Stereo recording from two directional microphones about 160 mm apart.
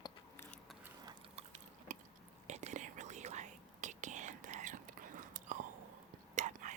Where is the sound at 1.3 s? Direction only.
45° right (ahead or behind).